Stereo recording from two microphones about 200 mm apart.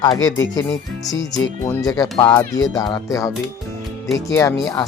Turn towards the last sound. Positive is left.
turn(degrees=15)  # may be behind; listen again after turning